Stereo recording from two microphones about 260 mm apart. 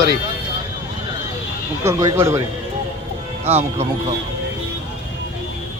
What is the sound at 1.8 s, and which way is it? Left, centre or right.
Speech, centre.